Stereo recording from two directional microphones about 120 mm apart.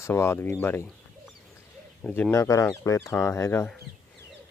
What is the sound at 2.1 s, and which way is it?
Speech, 20° left (ahead or behind).